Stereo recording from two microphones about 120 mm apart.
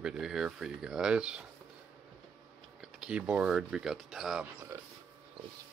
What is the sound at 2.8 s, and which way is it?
Speech, 5° right (ahead or behind).